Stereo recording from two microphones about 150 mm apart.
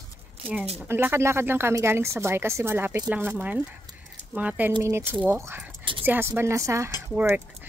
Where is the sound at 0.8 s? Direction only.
15° right (ahead or behind).